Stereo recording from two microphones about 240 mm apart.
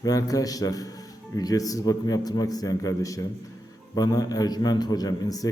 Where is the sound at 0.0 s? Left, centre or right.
Centre.